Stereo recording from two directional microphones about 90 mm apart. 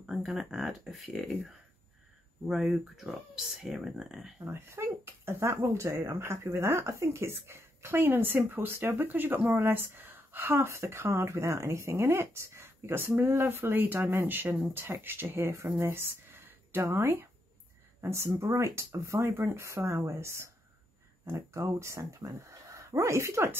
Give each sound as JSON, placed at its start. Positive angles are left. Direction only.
{"t": 0.0, "sound": "speech", "side_deg": -5}
{"t": 4.5, "sound": "speech", "side_deg": -30}